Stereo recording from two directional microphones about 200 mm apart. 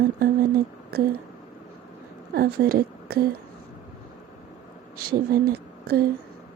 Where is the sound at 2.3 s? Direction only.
50° right (ahead or behind).